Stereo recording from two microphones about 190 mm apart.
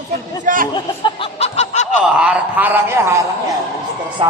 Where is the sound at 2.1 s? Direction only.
5° right (ahead or behind).